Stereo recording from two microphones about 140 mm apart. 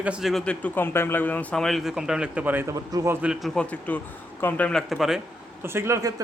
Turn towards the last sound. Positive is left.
turn(degrees=-20)  # may be behind; listen again after turning